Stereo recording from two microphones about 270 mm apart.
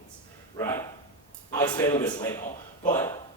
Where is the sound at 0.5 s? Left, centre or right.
Centre.